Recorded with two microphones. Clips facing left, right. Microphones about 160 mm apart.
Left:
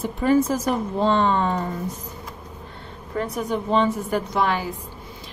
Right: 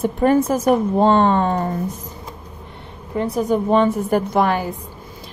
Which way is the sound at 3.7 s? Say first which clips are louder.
Right 3 dB; 55° right (ahead or behind).